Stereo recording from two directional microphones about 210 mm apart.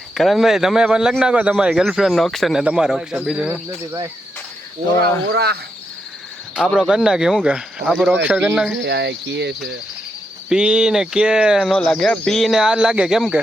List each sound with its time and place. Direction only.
0.1 s a man's voice: centre (ahead or behind)
5.3 s cricket: 50° right (ahead or behind)
6.6 s a man's voice: centre (ahead or behind)
8.8 s speech: 55° right (ahead or behind)
10.5 s a man's voice: 5° right (ahead or behind)